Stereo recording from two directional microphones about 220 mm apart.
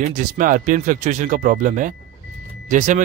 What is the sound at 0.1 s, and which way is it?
Speech, 35° right (ahead or behind).